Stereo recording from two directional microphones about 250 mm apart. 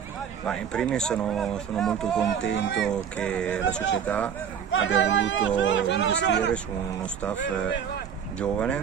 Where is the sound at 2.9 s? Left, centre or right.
Centre.